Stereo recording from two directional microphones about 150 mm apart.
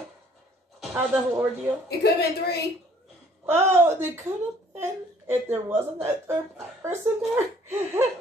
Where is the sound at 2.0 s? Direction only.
90° left.